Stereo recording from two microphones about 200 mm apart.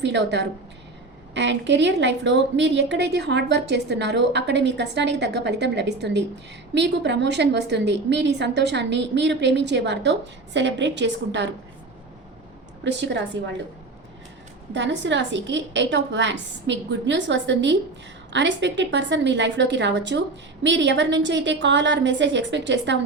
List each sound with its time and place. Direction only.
0.0 s a woman's voice: 60° right (ahead or behind)
12.8 s a woman's voice: 60° right (ahead or behind)
14.7 s a woman's voice: 60° right (ahead or behind)